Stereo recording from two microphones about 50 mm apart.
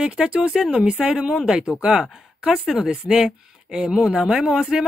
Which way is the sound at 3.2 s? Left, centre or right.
Centre.